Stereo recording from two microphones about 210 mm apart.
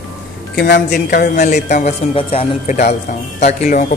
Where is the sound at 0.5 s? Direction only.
50° left (ahead or behind).